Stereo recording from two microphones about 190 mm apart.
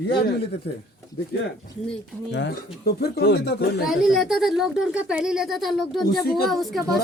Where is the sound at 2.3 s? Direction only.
70° left (ahead or behind).